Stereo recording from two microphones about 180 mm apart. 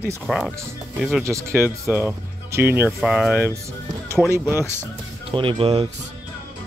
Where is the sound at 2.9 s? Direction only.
Centre (ahead or behind).